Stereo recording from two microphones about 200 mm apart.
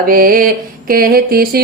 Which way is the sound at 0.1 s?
45° right (ahead or behind).